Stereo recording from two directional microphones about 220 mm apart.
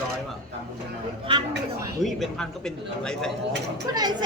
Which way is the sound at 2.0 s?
Centre (ahead or behind).